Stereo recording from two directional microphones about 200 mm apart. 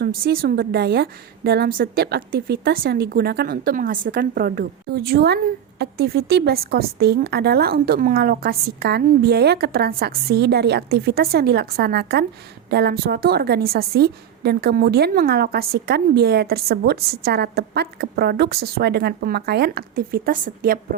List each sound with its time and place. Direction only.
0.3 s a woman's voice: 50° right (ahead or behind)